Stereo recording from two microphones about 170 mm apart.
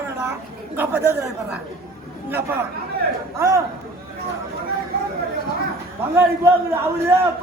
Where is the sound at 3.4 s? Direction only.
15° right (ahead or behind).